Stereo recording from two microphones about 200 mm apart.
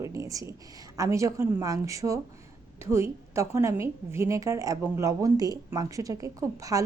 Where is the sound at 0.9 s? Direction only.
15° right (ahead or behind).